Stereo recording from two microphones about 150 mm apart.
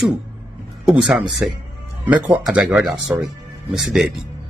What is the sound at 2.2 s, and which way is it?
Speech, 10° right (ahead or behind).